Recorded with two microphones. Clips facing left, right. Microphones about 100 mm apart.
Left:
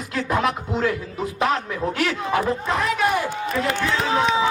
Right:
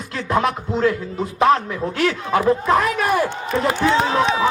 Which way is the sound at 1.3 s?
35° right (ahead or behind).